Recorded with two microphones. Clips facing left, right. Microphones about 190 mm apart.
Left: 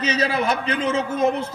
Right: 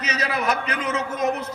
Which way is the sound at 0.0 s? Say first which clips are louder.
Left 4 dB; 30° left (ahead or behind).